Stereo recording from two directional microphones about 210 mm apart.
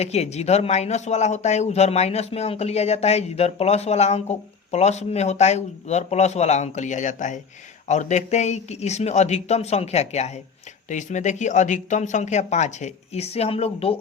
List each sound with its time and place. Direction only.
0.0 s speech: 30° left (ahead or behind)